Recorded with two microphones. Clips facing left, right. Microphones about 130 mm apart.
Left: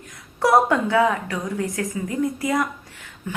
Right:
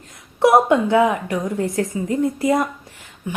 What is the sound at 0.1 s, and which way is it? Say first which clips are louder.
A woman's voice: right 3 dB; 20° right (ahead or behind).